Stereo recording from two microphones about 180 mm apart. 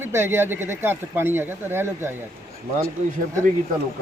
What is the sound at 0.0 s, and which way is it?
Speech, 15° right (ahead or behind).